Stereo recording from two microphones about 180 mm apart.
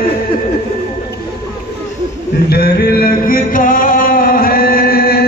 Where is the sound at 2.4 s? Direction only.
60° left (ahead or behind).